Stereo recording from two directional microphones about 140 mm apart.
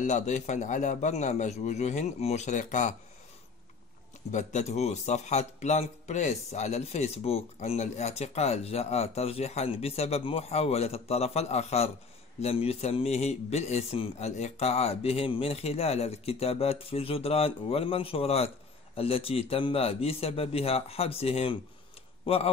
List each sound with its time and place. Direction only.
0.0 s a man's voice: 55° left (ahead or behind)
4.3 s speech: 55° left (ahead or behind)